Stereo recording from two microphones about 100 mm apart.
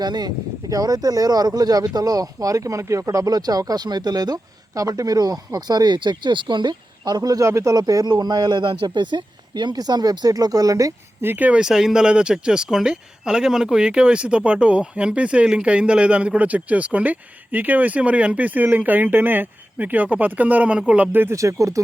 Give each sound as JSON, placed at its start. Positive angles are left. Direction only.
{"t": 0.0, "sound": "speech", "side_deg": -45}
{"t": 8.0, "sound": "speech", "side_deg": -45}
{"t": 11.2, "sound": "speech", "side_deg": -20}
{"t": 21.3, "sound": "speech", "side_deg": -30}